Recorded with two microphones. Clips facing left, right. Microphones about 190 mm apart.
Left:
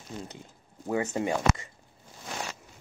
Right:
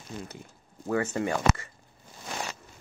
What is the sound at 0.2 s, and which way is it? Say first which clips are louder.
Speech: even; 20° left (ahead or behind).